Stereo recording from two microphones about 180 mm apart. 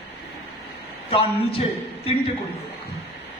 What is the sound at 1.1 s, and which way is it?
Speech, 30° left (ahead or behind).